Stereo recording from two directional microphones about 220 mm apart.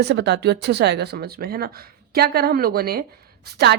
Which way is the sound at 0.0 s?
50° right (ahead or behind).